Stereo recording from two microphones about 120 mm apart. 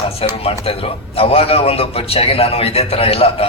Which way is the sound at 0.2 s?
55° left (ahead or behind).